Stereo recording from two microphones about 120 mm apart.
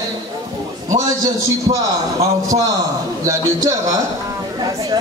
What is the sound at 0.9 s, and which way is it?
A man's voice, 30° right (ahead or behind).